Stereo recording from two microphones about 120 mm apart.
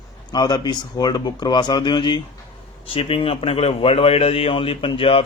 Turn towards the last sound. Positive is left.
turn(degrees=50)  # may be behind; listen again after turning